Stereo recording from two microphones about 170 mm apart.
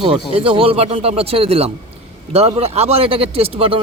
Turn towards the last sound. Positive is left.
turn(degrees=-35)  # may be behind; listen again after turning